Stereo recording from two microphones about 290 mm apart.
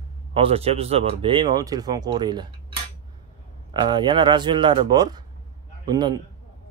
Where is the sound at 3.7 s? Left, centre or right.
Centre.